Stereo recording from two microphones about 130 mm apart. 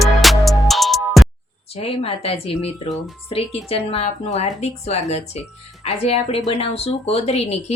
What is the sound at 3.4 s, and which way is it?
Speech, centre (ahead or behind).